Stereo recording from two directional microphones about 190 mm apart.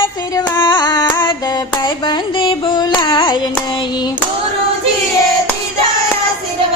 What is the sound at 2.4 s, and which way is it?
Carnatic music, 25° left (ahead or behind).